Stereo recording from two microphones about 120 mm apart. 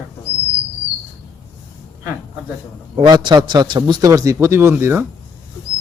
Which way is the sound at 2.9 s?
40° right (ahead or behind).